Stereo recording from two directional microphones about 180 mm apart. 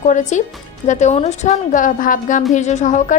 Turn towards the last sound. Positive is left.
turn(degrees=45)  # may be behind; listen again after turning